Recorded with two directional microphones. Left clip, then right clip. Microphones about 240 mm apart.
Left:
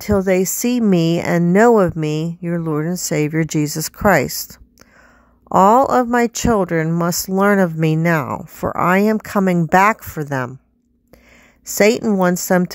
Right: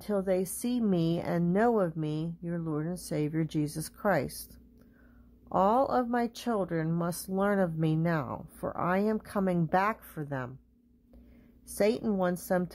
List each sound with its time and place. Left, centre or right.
0.0 s speech: left
5.5 s speech: left
11.7 s speech: left